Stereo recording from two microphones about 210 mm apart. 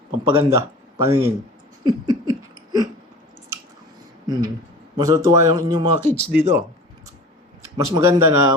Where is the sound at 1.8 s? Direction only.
20° right (ahead or behind).